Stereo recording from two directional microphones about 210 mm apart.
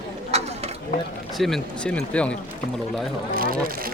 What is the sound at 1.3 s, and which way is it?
Speech, centre (ahead or behind).